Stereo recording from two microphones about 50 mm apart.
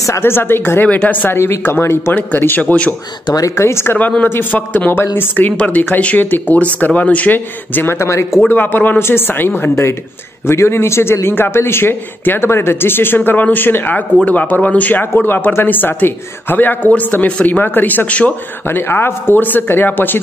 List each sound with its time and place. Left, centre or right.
0.2 s a man's voice: left
0.8 s speech: left
1.1 s speech: left
1.7 s speech: left
2.1 s speech: left
2.6 s speech: left
3.4 s speech: left
4.2 s speech: left
8.0 s speech: left
8.5 s a man's voice: left
10.4 s a man's voice: left
18.7 s a man's voice: left